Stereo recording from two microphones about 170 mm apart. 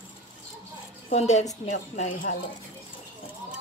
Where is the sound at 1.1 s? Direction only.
40° left (ahead or behind).